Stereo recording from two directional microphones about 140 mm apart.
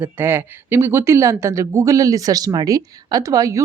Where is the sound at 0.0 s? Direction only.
15° right (ahead or behind).